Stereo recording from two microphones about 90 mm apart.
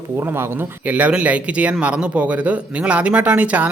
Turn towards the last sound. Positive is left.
turn(degrees=-15)  # may be behind; listen again after turning